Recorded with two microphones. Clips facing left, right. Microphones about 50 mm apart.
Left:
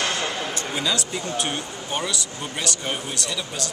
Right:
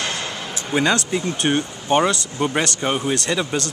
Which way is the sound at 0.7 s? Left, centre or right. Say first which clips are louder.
Right 9 dB; right.